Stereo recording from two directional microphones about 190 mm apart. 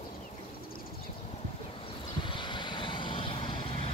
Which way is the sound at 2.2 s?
25° left (ahead or behind).